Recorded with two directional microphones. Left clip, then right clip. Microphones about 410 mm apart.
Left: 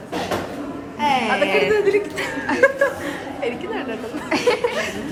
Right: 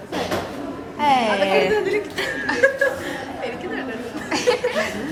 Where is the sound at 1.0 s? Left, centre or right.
Right.